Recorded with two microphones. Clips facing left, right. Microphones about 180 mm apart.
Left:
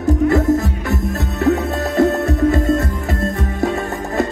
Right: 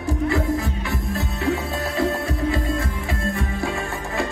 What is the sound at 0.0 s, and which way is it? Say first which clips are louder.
Music: left 8 dB; 45° left (ahead or behind).